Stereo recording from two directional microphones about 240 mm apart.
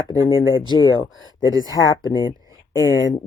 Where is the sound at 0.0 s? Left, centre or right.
Centre.